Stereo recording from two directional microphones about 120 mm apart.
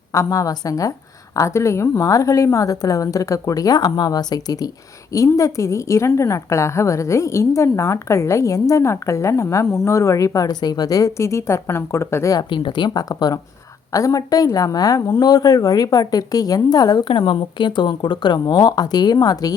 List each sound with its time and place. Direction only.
0.1 s a woman's voice: 30° left (ahead or behind)